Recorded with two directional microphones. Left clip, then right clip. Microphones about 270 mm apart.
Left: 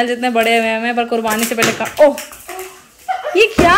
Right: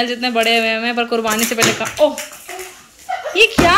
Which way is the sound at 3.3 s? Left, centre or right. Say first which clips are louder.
Left 1 dB; centre.